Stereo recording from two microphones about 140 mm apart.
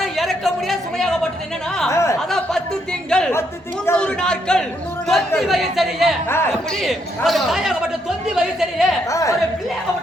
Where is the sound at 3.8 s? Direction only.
10° left (ahead or behind).